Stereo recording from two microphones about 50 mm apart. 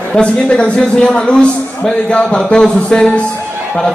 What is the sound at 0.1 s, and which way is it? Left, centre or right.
A man's voice, left.